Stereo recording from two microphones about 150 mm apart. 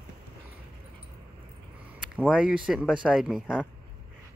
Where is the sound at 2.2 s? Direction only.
5° right (ahead or behind).